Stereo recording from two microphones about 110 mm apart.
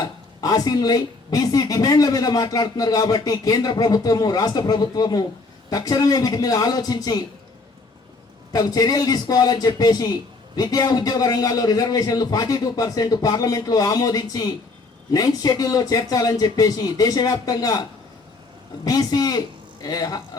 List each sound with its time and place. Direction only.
0.0 s a woman's voice: 35° left (ahead or behind)
8.5 s a woman's voice: 35° left (ahead or behind)
18.9 s a woman's voice: 35° left (ahead or behind)